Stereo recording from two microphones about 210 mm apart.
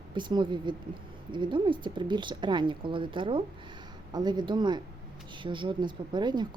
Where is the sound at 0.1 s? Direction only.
20° right (ahead or behind).